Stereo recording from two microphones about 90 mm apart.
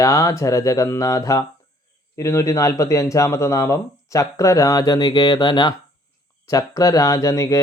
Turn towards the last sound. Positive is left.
turn(degrees=35)  # may be behind; listen again after turning